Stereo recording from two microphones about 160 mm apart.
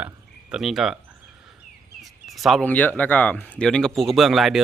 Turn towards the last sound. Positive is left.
turn(degrees=0)  # may be behind; listen again after turning